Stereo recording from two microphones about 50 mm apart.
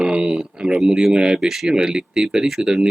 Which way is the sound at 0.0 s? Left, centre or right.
Centre.